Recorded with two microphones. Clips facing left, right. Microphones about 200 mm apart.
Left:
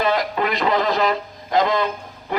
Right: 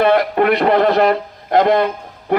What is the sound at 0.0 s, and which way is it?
A man's voice, 60° right (ahead or behind).